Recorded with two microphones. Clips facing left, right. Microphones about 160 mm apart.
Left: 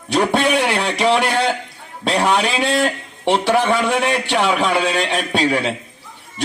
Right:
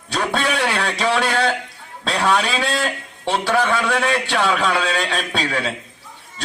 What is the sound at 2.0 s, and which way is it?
A man's voice, 20° left (ahead or behind).